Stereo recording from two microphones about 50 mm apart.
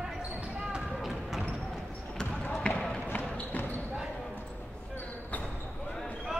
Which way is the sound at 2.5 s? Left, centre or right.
Centre.